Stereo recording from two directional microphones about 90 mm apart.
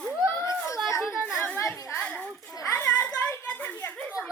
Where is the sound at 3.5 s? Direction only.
15° left (ahead or behind).